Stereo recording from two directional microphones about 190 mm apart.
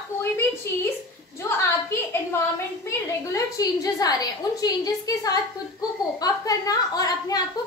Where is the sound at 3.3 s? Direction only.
20° left (ahead or behind).